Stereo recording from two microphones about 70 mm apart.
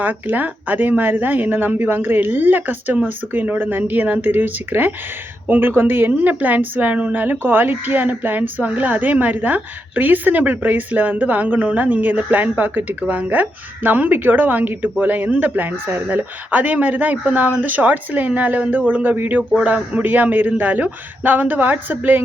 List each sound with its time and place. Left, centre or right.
0.0 s a woman's voice: right